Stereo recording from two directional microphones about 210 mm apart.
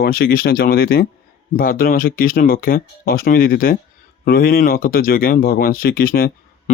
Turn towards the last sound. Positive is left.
turn(degrees=45)  # may be behind; listen again after turning